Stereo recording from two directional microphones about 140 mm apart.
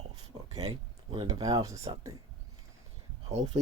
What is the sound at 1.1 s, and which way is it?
Speech, 35° right (ahead or behind).